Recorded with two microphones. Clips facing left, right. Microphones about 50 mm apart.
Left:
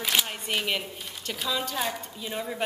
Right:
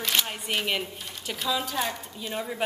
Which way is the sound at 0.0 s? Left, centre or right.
Centre.